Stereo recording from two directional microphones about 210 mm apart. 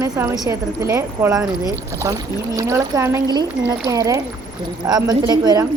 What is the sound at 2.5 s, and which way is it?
Speech, 15° right (ahead or behind).